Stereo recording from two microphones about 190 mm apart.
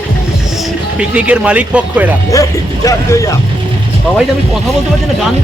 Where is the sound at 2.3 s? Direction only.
15° left (ahead or behind).